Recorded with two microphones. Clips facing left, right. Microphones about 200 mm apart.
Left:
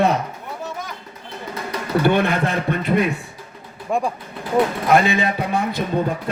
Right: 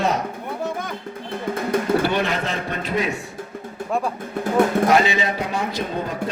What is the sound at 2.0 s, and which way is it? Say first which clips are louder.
A man's voice: left 4 dB; 55° left (ahead or behind).